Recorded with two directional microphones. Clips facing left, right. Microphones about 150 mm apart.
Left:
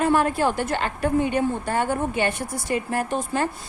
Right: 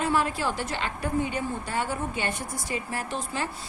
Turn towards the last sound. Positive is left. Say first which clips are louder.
# left 7 dB
turn(degrees=50)  # may be behind; listen again after turning